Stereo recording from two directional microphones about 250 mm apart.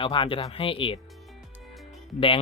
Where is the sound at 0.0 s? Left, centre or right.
Centre.